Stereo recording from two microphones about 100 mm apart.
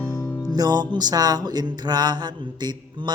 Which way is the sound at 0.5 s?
45° right (ahead or behind).